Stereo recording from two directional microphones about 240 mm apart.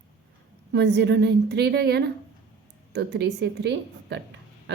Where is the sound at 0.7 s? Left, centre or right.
Right.